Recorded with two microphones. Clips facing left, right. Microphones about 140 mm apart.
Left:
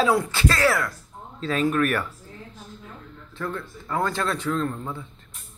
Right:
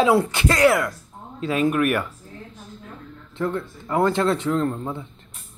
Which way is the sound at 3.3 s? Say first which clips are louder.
Right 6 dB; 20° right (ahead or behind).